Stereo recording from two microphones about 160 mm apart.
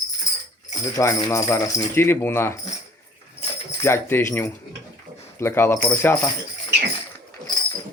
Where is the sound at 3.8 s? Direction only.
15° left (ahead or behind).